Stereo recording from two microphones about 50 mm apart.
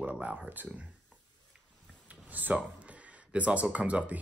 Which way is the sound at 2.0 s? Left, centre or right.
Right.